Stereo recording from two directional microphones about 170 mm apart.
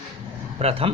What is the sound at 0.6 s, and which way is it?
Speech, 35° right (ahead or behind).